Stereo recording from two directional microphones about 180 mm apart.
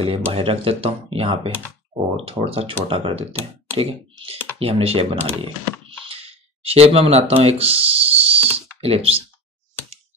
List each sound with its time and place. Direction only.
0.0 s speech: 30° right (ahead or behind)